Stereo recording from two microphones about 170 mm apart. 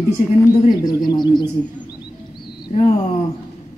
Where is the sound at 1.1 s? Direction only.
25° left (ahead or behind).